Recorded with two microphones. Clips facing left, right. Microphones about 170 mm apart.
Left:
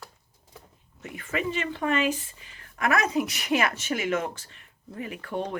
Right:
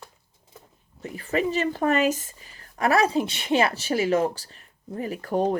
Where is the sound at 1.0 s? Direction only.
35° right (ahead or behind).